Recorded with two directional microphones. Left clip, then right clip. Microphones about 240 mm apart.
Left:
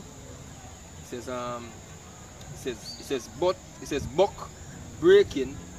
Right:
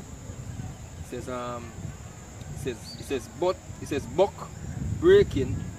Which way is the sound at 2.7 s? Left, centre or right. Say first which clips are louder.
Even; centre.